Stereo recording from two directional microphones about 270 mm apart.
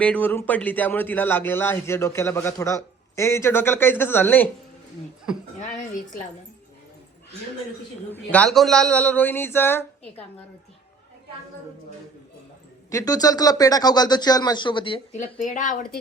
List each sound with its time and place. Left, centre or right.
0.0 s a man's voice: centre
8.1 s a man's voice: centre
12.9 s a man's voice: centre; by 16.0 s left